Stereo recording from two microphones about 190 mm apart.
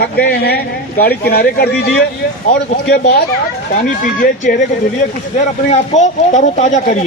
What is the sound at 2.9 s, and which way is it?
Speech, 50° left (ahead or behind).